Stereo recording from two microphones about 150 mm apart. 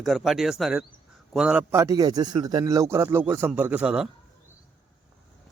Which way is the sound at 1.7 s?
20° right (ahead or behind).